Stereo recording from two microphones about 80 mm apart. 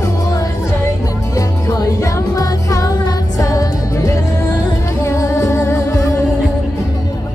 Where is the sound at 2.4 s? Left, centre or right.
Left.